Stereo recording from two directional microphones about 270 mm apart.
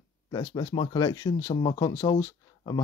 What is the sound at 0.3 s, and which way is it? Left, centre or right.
Speech, centre.